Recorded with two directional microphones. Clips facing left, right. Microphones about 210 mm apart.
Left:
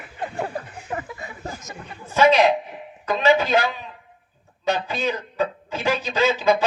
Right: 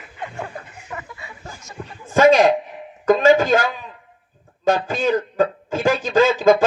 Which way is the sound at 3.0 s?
45° right (ahead or behind).